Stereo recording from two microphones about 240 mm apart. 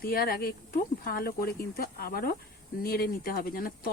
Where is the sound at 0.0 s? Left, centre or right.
Left.